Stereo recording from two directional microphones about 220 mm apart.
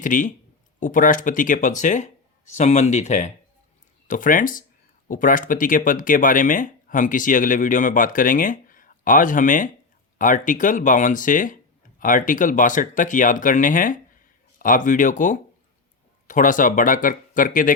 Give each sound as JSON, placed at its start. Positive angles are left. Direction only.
{"t": 0.0, "sound": "speech", "side_deg": 35}